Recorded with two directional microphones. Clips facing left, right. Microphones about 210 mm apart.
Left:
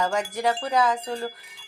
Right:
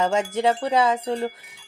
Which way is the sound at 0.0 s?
25° right (ahead or behind).